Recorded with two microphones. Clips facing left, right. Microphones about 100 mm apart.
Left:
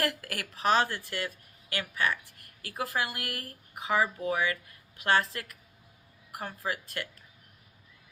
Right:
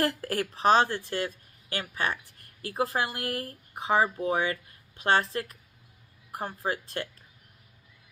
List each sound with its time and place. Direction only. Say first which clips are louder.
0.0 s a woman's voice: right 5 dB; 30° right (ahead or behind)